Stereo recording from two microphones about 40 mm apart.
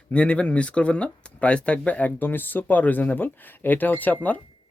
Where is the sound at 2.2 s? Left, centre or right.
Left.